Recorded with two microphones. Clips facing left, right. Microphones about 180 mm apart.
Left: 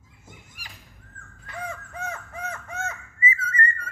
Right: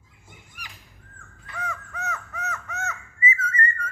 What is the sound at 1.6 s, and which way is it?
Crow, 30° left (ahead or behind).